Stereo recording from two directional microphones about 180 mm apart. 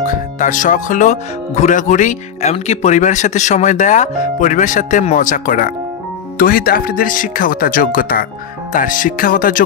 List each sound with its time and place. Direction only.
0.1 s speech: 45° left (ahead or behind)